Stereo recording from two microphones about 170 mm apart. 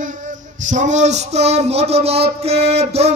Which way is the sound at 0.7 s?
45° right (ahead or behind).